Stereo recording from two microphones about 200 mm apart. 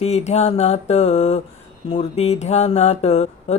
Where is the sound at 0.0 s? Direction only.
35° left (ahead or behind).